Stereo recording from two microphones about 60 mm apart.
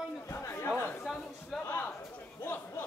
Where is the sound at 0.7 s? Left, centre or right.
Left.